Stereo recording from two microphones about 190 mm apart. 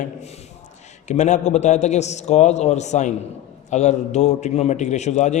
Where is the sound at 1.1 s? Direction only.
40° left (ahead or behind).